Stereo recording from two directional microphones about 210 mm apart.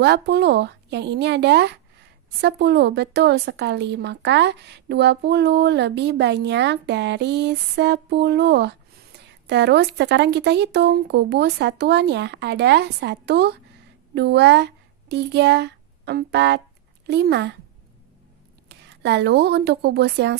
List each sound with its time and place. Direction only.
0.0 s speech: 50° right (ahead or behind)
18.7 s speech: 55° right (ahead or behind)